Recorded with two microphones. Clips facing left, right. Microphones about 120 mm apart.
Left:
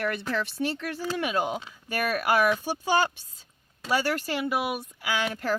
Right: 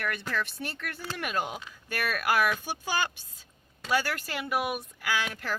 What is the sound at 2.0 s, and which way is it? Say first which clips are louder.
Speech: left 3 dB; 35° left (ahead or behind).